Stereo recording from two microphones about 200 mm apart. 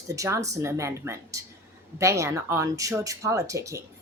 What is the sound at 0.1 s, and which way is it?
Speech, 15° right (ahead or behind).